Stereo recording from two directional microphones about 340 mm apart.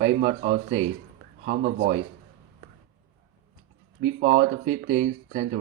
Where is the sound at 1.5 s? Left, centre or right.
Right.